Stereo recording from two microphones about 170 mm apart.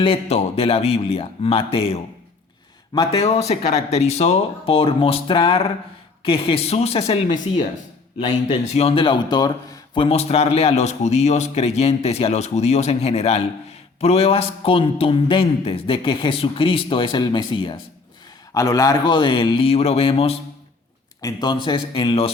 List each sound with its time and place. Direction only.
0.0 s speech: 35° left (ahead or behind)
3.1 s a man's voice: 35° left (ahead or behind)
21.2 s a man's voice: 20° left (ahead or behind)